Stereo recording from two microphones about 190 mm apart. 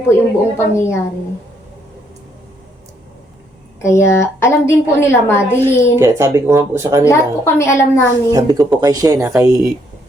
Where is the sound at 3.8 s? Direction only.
15° left (ahead or behind).